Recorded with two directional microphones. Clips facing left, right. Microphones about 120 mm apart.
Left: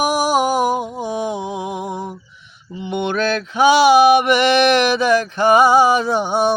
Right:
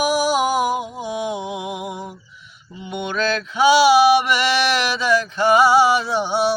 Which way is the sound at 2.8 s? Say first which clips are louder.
Left 4 dB; 60° left (ahead or behind).